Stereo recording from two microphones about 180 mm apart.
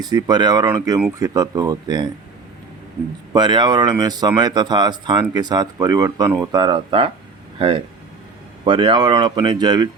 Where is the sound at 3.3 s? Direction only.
25° right (ahead or behind).